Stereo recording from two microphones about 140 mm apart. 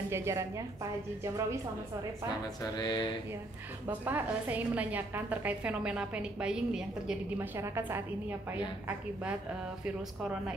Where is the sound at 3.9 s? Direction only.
10° right (ahead or behind).